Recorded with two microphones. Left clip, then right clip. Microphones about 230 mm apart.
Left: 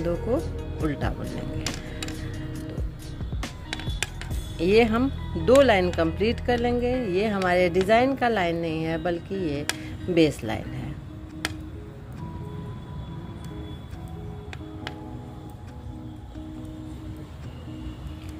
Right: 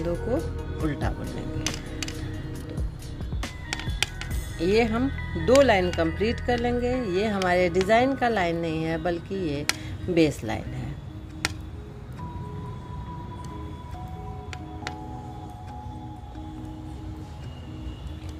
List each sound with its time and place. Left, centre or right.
0.0 s speech: centre
4.6 s speech: centre